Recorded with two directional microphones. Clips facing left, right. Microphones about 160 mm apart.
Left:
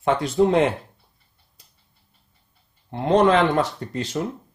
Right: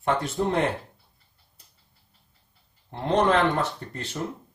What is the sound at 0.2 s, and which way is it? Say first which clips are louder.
Speech: left 7 dB; 90° left.